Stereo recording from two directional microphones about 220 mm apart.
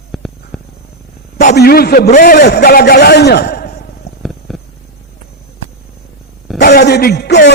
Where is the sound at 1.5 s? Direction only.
45° left (ahead or behind).